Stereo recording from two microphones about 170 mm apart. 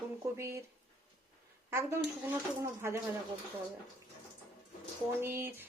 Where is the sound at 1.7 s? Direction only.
15° right (ahead or behind).